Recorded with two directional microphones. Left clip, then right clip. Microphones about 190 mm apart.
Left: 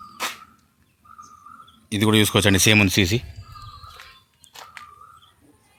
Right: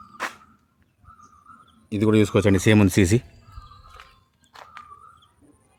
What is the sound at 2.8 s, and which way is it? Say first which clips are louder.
Speech: left 2 dB; 30° right (ahead or behind).